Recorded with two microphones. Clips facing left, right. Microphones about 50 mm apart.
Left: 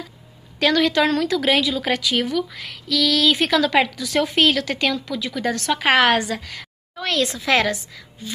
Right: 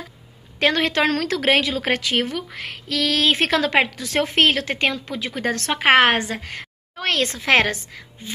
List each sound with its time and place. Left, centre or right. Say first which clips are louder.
0.6 s a woman's voice: left 1 dB; right